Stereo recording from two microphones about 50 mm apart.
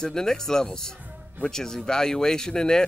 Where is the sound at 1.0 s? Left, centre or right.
Right.